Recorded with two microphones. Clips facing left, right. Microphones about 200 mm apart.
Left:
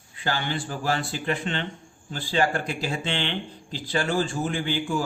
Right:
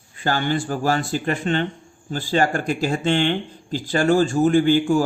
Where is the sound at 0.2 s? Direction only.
45° right (ahead or behind).